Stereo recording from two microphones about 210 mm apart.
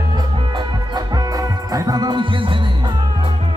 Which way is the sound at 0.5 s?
20° right (ahead or behind).